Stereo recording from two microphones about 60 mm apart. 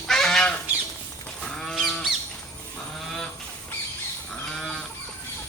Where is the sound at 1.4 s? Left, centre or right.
Centre.